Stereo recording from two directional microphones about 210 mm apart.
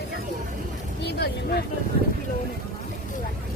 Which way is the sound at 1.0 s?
50° left (ahead or behind).